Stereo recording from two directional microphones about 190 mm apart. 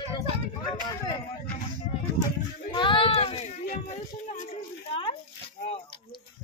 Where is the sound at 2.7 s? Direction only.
25° left (ahead or behind).